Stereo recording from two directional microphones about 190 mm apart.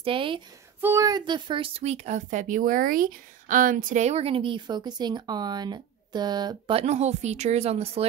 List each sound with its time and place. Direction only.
0.0 s speech: 25° right (ahead or behind)
0.7 s speech: 15° right (ahead or behind)
6.8 s speech: 35° right (ahead or behind)